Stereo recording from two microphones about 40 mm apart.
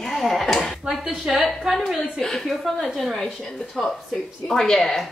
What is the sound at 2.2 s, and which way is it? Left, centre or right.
A woman's voice, centre.